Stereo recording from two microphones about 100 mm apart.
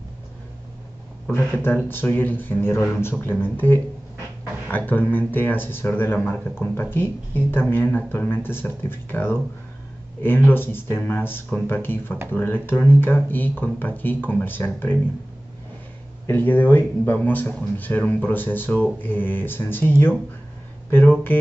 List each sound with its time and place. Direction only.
1.6 s a man's voice: 20° left (ahead or behind)
16.3 s speech: 20° left (ahead or behind)